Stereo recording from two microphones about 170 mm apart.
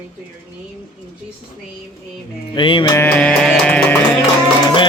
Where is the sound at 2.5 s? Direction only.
30° left (ahead or behind).